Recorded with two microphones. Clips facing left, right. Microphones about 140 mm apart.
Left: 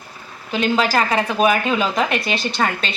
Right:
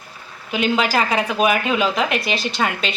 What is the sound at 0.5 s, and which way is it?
A woman's voice, 10° right (ahead or behind).